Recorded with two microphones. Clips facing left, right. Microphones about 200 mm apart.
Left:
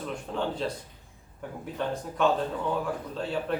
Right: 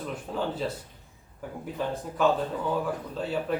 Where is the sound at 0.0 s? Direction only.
5° right (ahead or behind).